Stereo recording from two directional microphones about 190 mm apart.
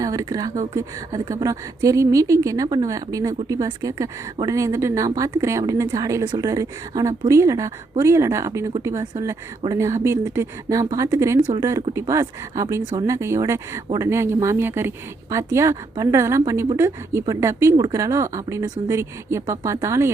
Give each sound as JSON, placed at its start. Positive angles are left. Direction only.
{"t": 0.0, "sound": "speech", "side_deg": -20}